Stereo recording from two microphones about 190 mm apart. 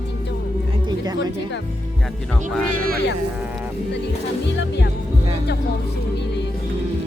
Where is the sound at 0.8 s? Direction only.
20° right (ahead or behind).